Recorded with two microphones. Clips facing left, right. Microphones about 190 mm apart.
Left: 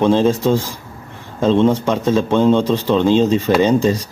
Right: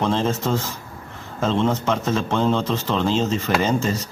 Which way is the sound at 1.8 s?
15° left (ahead or behind).